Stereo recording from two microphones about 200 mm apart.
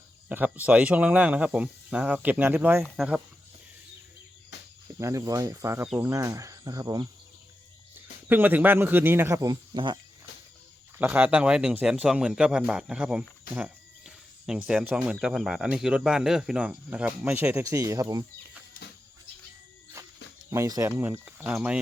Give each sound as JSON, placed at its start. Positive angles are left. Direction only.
{"t": 0.3, "sound": "speech", "side_deg": -10}
{"t": 4.9, "sound": "speech", "side_deg": -15}
{"t": 8.3, "sound": "speech", "side_deg": -10}
{"t": 10.9, "sound": "speech", "side_deg": -10}
{"t": 20.5, "sound": "speech", "side_deg": -15}